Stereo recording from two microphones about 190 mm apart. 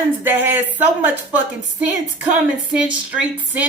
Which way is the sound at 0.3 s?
10° right (ahead or behind).